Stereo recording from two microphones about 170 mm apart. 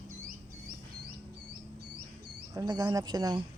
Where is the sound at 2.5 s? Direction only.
20° right (ahead or behind).